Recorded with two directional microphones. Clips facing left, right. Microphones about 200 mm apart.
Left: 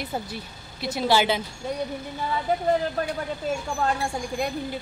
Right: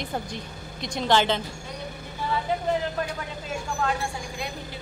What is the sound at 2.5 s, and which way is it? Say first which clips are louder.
Speech: left 5 dB; 45° left (ahead or behind).